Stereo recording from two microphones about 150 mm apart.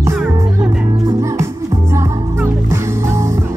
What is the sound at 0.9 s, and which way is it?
Music, 20° right (ahead or behind).